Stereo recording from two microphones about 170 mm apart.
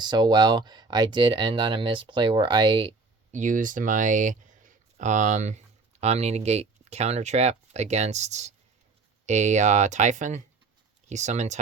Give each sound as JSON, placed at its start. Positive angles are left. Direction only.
{"t": 0.0, "sound": "speech", "side_deg": -25}
{"t": 3.3, "sound": "speech", "side_deg": -50}